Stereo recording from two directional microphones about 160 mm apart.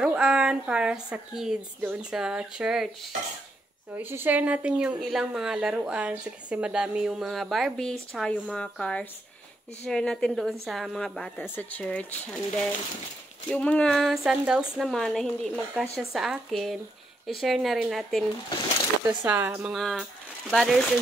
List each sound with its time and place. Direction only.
0.0 s speech: 5° right (ahead or behind)
3.9 s speech: 15° right (ahead or behind)
19.0 s speech: 10° right (ahead or behind)